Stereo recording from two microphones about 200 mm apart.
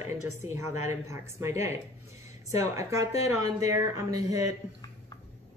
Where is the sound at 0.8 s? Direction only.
15° right (ahead or behind).